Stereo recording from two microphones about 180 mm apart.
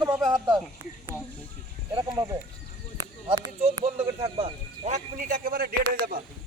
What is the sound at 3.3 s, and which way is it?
Speech, 35° right (ahead or behind).